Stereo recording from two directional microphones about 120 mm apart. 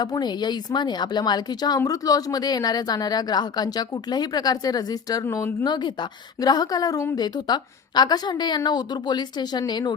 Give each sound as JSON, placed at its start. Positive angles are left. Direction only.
{"t": 0.0, "sound": "speech", "side_deg": 35}
{"t": 5.6, "sound": "speech", "side_deg": 40}